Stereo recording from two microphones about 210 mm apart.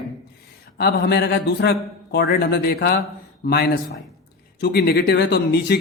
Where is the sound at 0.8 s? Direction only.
50° left (ahead or behind).